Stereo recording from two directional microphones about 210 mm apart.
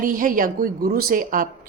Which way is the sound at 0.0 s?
40° right (ahead or behind).